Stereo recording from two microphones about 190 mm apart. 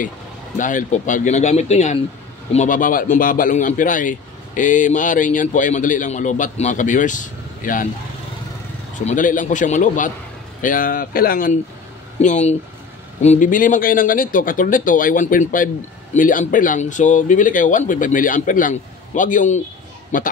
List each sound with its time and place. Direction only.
0.6 s speech: 40° left (ahead or behind)
8.9 s speech: 40° left (ahead or behind)
12.2 s speech: 40° left (ahead or behind)